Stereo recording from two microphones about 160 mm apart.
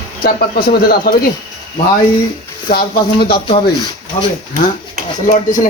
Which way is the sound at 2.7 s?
75° left (ahead or behind).